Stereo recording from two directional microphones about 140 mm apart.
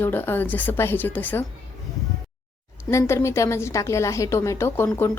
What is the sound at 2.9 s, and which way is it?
A woman's voice, 20° left (ahead or behind).